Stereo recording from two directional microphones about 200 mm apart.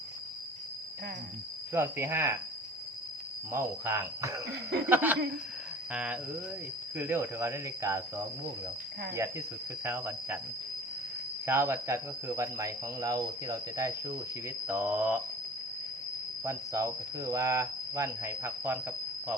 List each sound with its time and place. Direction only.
1.7 s speech: 10° right (ahead or behind)
3.5 s speech: 15° right (ahead or behind)
9.8 s speech: 10° right (ahead or behind)
11.4 s speech: 10° right (ahead or behind)
16.4 s speech: 15° right (ahead or behind)